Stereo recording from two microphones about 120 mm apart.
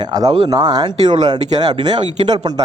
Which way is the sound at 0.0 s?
35° right (ahead or behind).